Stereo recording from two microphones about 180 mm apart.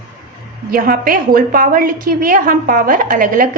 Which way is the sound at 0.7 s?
55° right (ahead or behind).